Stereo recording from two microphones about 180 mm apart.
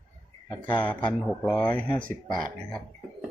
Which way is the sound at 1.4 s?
5° left (ahead or behind).